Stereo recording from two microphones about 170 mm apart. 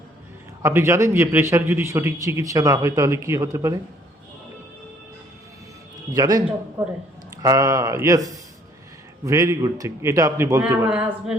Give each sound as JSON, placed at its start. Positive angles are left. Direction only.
{"t": 0.6, "sound": "a man's voice", "side_deg": -15}
{"t": 6.1, "sound": "a man's voice", "side_deg": -20}